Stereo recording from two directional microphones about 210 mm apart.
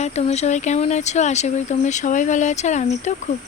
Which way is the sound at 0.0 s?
30° left (ahead or behind).